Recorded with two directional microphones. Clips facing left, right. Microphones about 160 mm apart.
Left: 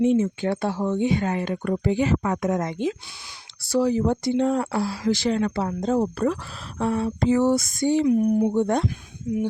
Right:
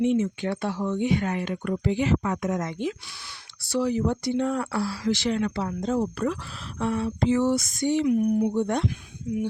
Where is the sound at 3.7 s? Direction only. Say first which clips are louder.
Left 3 dB; 40° left (ahead or behind).